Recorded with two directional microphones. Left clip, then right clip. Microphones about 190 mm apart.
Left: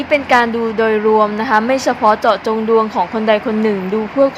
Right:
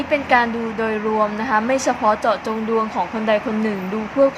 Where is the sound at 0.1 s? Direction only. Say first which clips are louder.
Left 5 dB; 20° left (ahead or behind).